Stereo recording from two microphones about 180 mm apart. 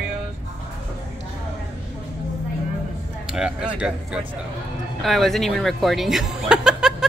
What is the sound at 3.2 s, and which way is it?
Speech, 5° right (ahead or behind).